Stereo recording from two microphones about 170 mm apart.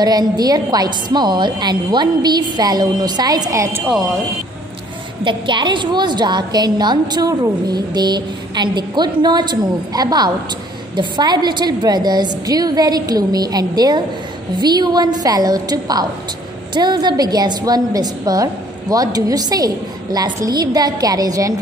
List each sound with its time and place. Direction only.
0.0 s a woman's voice: 25° right (ahead or behind)
5.2 s a woman's voice: 30° right (ahead or behind)